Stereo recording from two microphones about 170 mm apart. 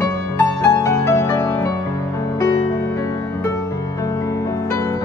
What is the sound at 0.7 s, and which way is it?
Music, 20° left (ahead or behind).